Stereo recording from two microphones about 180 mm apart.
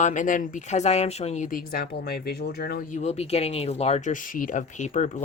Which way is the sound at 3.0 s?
35° left (ahead or behind).